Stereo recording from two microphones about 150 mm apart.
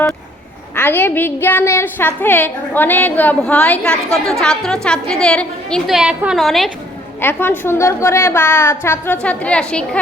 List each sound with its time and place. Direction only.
0.8 s a woman's voice: 15° left (ahead or behind)
6.0 s a woman's voice: 5° right (ahead or behind)
7.2 s a woman's voice: 15° left (ahead or behind)